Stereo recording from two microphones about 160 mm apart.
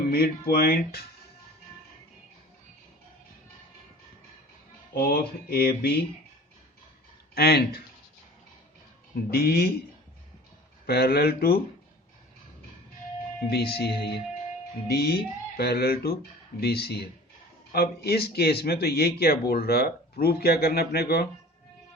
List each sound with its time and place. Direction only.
0.1 s speech: 70° left (ahead or behind)
4.9 s speech: 70° left (ahead or behind)
7.3 s speech: 80° left
9.3 s speech: 75° left (ahead or behind)
10.8 s speech: 85° left
13.5 s speech: 80° left